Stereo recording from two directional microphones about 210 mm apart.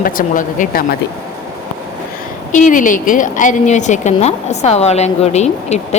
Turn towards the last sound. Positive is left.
turn(degrees=30)  # may be behind; listen again after turning